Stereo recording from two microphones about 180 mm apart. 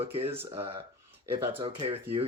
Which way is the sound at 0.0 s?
35° right (ahead or behind).